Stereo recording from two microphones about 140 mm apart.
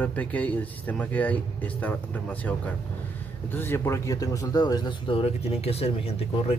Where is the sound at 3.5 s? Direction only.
15° left (ahead or behind); by 6.2 s 45° left (ahead or behind).